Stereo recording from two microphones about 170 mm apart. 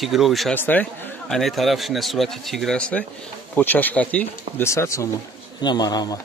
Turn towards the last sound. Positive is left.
turn(degrees=25)  # may be behind; listen again after turning